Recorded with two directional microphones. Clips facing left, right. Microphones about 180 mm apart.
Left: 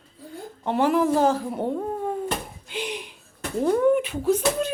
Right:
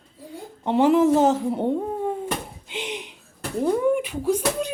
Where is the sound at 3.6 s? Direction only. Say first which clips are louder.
Left 1 dB; 10° right (ahead or behind).